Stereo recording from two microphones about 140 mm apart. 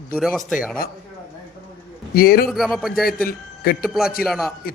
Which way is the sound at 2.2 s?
90° left.